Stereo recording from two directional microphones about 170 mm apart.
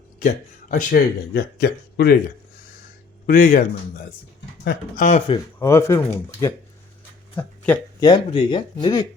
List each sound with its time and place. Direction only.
0.2 s speech: 50° left (ahead or behind); by 2.1 s 65° left (ahead or behind)
3.2 s speech: 55° left (ahead or behind)
4.6 s speech: 55° left (ahead or behind)
5.5 s speech: 15° left (ahead or behind)
7.3 s a sound: 10° left (ahead or behind)
8.0 s speech: 25° left (ahead or behind)